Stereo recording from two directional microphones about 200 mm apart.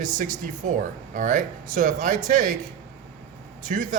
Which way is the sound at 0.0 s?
40° right (ahead or behind).